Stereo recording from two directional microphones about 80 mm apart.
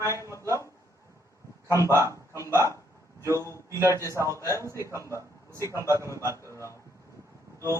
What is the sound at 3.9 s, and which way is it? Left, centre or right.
Speech, right.